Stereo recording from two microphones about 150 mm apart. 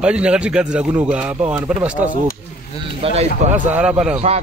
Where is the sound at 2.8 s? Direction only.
40° right (ahead or behind).